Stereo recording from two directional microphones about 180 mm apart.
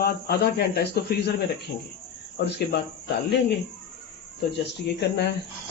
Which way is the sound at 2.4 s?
70° left (ahead or behind).